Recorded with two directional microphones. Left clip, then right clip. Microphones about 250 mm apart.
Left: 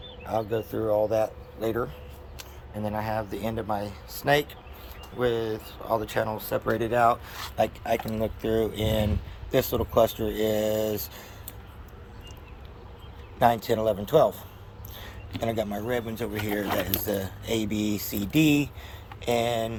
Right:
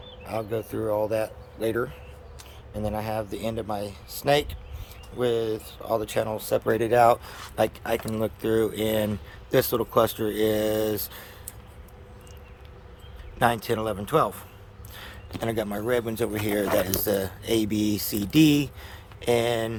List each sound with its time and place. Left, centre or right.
0.3 s speech: centre
13.4 s speech: centre
14.9 s a sound: centre
15.9 s speech: centre